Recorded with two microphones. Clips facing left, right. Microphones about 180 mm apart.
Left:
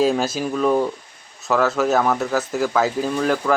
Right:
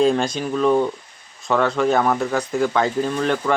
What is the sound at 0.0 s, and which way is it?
Speech, 5° left (ahead or behind).